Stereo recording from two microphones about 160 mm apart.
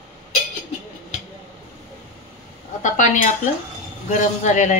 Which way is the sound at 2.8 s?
50° left (ahead or behind).